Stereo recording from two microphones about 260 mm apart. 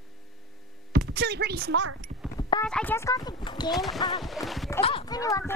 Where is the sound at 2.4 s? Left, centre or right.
Centre.